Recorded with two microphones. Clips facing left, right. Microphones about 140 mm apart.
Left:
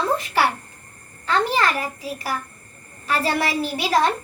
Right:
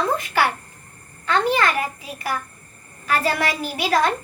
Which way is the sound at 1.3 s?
35° left (ahead or behind).